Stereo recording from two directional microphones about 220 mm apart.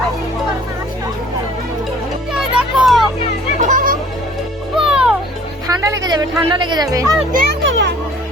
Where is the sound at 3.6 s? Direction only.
35° right (ahead or behind).